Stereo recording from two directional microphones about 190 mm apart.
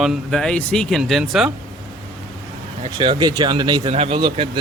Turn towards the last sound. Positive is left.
turn(degrees=-25)  # may be behind; listen again after turning